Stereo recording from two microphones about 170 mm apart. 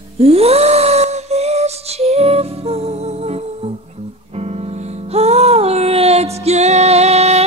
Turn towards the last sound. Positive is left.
turn(degrees=-40)  # may be behind; listen again after turning